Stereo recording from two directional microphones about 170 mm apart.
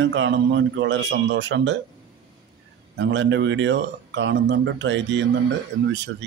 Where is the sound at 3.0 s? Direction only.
90° right.